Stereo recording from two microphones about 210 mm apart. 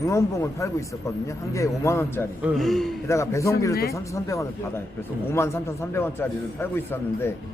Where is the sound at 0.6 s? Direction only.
15° left (ahead or behind).